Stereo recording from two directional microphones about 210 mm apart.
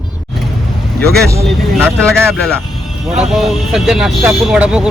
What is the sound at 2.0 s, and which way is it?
Speech, 5° left (ahead or behind).